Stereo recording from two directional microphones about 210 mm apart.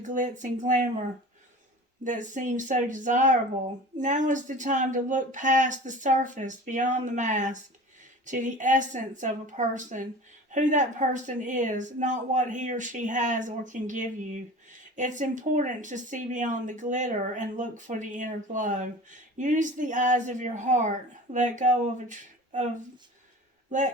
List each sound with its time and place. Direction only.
0.0 s speech: 35° right (ahead or behind)
2.0 s speech: 35° right (ahead or behind)
23.7 s speech: 35° right (ahead or behind)